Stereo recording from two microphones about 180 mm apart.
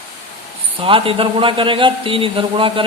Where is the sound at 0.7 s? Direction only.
30° right (ahead or behind).